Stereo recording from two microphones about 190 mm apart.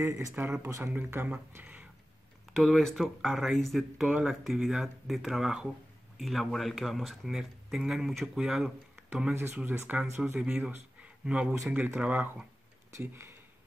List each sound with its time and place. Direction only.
0.0 s speech: 15° right (ahead or behind)